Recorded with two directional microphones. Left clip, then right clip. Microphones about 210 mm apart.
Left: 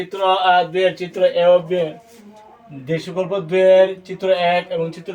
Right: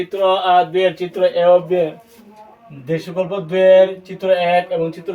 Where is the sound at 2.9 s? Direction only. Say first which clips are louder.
Right 1 dB; 10° right (ahead or behind).